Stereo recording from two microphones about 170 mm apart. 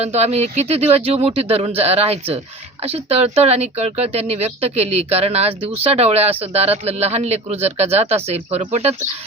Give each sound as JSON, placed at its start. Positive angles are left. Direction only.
{"t": 0.0, "sound": "speech", "side_deg": -40}